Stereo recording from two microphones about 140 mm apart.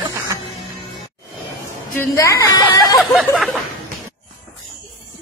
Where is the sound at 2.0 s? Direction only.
20° left (ahead or behind).